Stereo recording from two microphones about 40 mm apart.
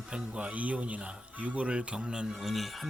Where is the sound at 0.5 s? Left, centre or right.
Right.